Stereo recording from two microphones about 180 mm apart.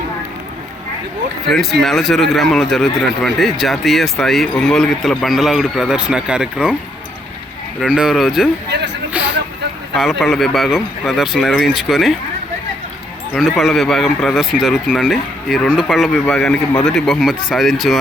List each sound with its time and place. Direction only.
1.5 s speech: centre (ahead or behind)
7.8 s speech: 5° right (ahead or behind)
8.7 s speech: 70° right (ahead or behind)
10.0 s speech: centre (ahead or behind)
13.3 s speech: centre (ahead or behind)